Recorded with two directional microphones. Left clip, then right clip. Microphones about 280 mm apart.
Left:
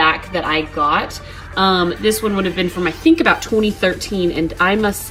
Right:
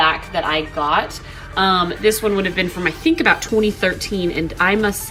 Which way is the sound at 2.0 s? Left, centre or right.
Centre.